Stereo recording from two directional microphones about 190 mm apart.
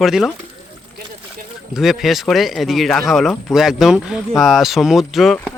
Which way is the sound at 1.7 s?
Centre (ahead or behind).